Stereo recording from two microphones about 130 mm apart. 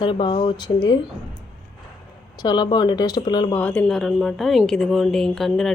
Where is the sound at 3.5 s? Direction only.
15° left (ahead or behind).